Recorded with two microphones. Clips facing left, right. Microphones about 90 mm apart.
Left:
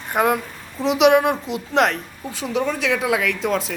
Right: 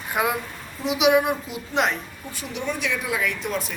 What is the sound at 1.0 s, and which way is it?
A woman's voice, 90° left.